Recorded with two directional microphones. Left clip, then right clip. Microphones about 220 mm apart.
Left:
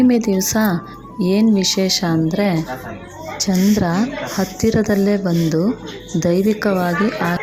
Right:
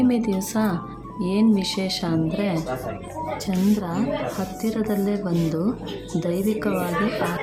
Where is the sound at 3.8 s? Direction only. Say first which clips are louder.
Left 5 dB; 30° left (ahead or behind).